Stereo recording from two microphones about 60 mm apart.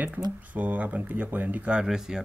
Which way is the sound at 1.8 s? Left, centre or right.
Centre.